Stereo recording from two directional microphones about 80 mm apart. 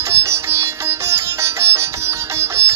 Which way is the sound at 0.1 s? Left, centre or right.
Right.